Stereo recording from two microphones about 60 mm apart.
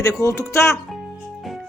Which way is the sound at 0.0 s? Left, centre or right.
Left.